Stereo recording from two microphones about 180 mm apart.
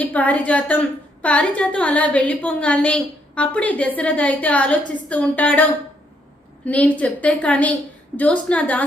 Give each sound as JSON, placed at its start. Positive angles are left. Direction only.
{"t": 0.0, "sound": "a woman's voice", "side_deg": 10}